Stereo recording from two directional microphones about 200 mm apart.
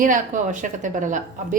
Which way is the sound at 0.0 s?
40° right (ahead or behind).